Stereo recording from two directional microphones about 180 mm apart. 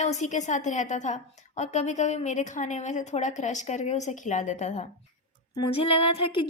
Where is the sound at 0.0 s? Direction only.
40° left (ahead or behind).